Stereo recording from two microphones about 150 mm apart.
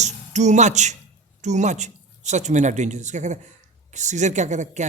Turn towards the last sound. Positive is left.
turn(degrees=-50)  # may be behind; listen again after turning